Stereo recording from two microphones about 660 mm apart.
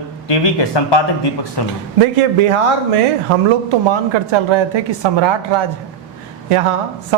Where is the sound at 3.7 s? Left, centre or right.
Right.